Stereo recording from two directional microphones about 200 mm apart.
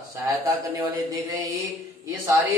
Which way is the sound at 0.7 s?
15° right (ahead or behind).